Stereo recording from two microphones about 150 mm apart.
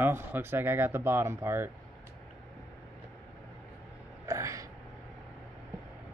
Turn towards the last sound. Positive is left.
turn(degrees=-20)  # may be behind; listen again after turning